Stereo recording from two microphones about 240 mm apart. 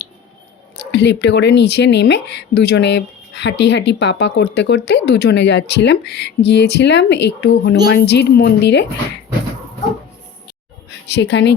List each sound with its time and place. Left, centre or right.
0.8 s speech: left
10.8 s speech: left